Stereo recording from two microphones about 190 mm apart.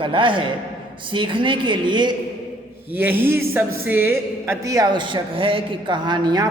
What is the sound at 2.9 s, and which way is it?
A man's voice, 10° right (ahead or behind).